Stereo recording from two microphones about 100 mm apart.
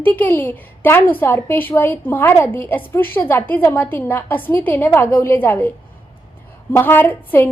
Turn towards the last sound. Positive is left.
turn(degrees=20)  # may be behind; listen again after turning